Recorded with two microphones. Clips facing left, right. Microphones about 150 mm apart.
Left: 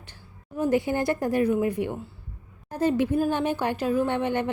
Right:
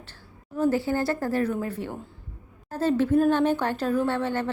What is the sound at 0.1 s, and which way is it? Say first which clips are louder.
A woman's voice: even; 15° left (ahead or behind).